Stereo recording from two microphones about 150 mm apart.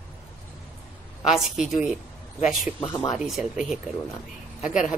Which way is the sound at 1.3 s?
Centre (ahead or behind).